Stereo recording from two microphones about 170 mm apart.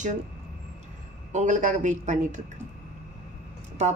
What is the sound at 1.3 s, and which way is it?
Speech, 45° right (ahead or behind).